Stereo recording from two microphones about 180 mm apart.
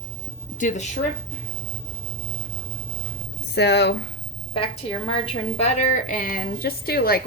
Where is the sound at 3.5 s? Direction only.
70° left (ahead or behind).